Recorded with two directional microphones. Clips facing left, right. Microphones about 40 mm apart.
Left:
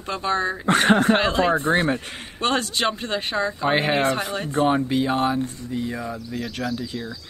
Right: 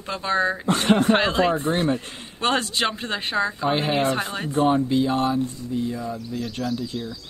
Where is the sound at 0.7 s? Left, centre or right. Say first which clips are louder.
Left 4 dB; left.